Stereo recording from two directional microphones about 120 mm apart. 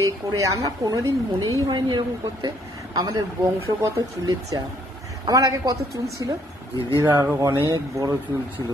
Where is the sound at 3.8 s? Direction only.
30° right (ahead or behind).